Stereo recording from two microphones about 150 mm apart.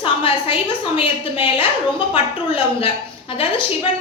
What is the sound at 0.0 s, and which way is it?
A woman's voice, 35° left (ahead or behind).